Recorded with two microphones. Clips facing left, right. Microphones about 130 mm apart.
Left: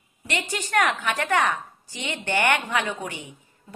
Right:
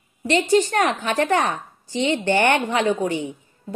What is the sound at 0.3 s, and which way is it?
A woman's voice, 30° right (ahead or behind).